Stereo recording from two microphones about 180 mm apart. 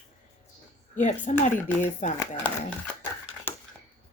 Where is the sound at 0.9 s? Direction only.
45° left (ahead or behind).